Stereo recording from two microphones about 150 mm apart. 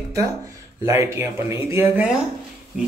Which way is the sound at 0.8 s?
20° right (ahead or behind).